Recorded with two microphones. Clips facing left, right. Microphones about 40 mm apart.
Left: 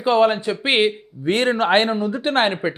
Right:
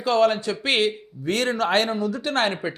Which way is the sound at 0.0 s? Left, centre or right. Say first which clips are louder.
Left 3 dB; left.